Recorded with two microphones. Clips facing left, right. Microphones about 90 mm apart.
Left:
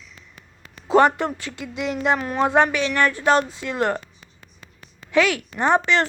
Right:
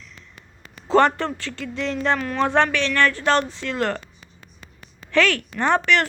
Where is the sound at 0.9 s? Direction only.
15° left (ahead or behind).